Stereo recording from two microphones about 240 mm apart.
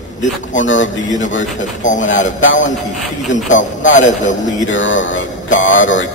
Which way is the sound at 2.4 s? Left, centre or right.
Left.